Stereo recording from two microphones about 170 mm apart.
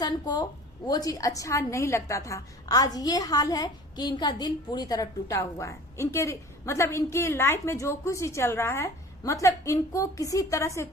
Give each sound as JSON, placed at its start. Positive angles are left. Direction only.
{"t": 0.0, "sound": "a woman's voice", "side_deg": 25}